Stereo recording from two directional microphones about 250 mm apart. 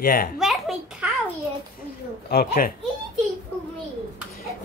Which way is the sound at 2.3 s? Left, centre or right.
Left.